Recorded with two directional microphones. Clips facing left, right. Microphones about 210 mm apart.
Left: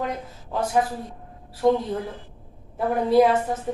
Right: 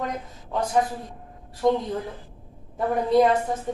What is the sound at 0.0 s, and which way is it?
A woman's voice, 5° left (ahead or behind).